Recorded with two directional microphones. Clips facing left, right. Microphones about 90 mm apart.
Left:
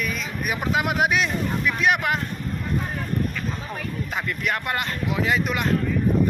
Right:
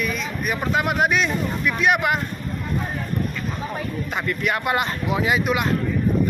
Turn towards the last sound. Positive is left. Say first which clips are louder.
# right 2 dB
turn(degrees=-5)  # may be behind; listen again after turning